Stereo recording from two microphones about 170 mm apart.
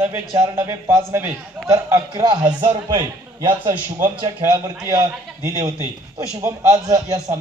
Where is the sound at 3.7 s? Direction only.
10° right (ahead or behind).